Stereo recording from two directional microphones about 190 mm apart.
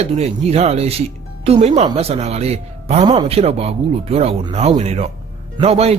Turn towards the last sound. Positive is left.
turn(degrees=-35)  # may be behind; listen again after turning